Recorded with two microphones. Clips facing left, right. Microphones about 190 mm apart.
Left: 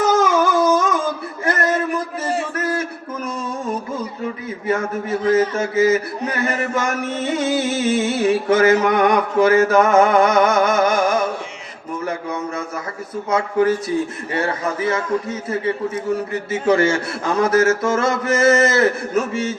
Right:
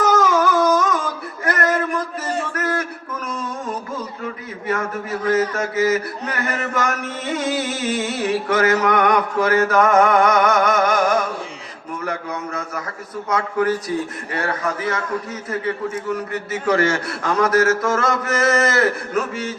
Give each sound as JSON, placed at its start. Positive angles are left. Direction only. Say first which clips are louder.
{"t": 0.0, "sound": "a sound", "louder": "left 1 dB", "side_deg": 25}
{"t": 5.2, "sound": "music", "louder": "left 2 dB", "side_deg": 25}
{"t": 13.3, "sound": "music", "louder": "left 3 dB", "side_deg": 25}